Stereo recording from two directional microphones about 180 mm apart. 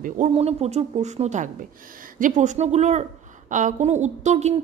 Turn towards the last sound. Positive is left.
turn(degrees=-40)  # may be behind; listen again after turning